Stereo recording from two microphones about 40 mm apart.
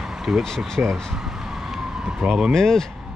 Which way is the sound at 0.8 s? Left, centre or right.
Right.